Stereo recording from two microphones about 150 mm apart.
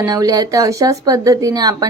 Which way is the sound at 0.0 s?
25° right (ahead or behind).